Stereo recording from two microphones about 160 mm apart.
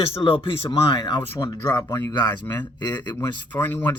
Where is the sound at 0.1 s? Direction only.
35° left (ahead or behind).